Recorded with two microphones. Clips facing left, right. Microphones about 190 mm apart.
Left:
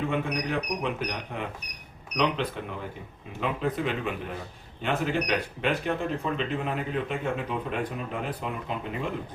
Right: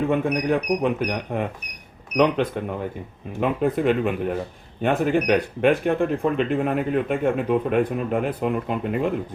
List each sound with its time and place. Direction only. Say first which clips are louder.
0.1 s speech: right 8 dB; 50° right (ahead or behind)